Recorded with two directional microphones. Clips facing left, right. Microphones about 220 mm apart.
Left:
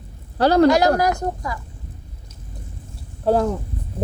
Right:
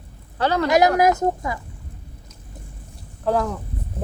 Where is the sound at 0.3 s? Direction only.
40° left (ahead or behind).